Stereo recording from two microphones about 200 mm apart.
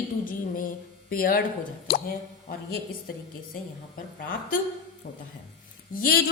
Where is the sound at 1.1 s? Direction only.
45° left (ahead or behind).